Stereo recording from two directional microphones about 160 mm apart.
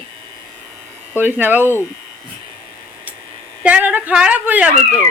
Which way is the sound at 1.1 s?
10° right (ahead or behind).